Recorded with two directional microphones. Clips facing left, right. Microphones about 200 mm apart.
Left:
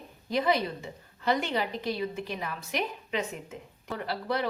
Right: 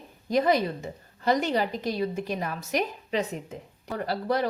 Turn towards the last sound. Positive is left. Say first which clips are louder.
# right 4 dB
turn(degrees=-40)  # may be behind; listen again after turning